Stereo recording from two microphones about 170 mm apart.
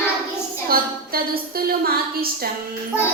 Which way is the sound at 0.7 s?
60° right (ahead or behind).